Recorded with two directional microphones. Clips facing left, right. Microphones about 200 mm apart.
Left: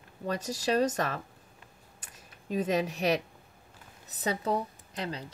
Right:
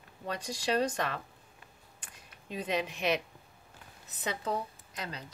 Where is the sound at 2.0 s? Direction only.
45° left (ahead or behind).